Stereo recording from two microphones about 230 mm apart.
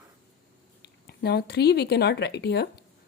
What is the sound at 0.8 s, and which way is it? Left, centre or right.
Speech, left.